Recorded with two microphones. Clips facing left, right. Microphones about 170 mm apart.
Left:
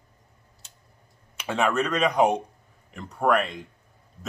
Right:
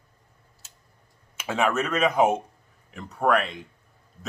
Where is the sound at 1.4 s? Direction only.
5° right (ahead or behind).